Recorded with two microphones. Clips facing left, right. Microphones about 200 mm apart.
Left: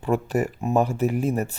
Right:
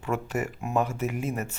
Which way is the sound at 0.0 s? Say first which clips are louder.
Left 6 dB; 35° left (ahead or behind).